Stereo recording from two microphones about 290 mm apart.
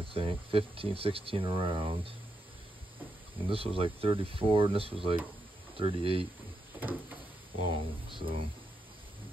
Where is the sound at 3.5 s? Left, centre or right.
Centre.